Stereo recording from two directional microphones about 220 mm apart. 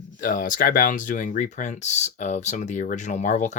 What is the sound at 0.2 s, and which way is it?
Speech, 40° left (ahead or behind).